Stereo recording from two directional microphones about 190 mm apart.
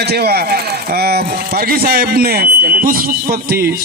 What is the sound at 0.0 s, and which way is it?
A man's voice, 55° right (ahead or behind).